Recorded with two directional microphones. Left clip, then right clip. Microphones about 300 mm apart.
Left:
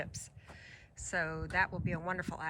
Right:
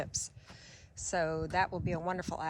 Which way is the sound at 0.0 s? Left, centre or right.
Centre.